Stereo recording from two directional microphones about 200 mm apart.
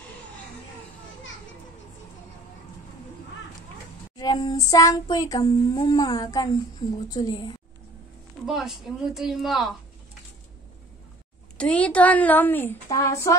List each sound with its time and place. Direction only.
4.2 s child singing: 20° left (ahead or behind)
8.5 s a woman's voice: centre (ahead or behind)
11.5 s a woman's voice: 5° left (ahead or behind)